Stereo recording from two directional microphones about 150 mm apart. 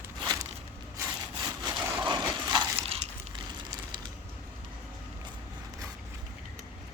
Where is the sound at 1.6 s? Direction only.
30° right (ahead or behind).